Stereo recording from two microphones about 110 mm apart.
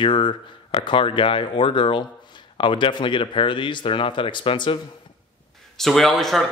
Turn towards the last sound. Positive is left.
turn(degrees=0)  # may be behind; listen again after turning